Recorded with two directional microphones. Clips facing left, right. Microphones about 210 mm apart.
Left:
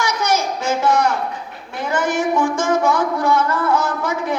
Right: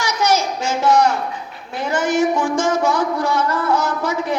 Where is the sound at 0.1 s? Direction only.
55° left (ahead or behind).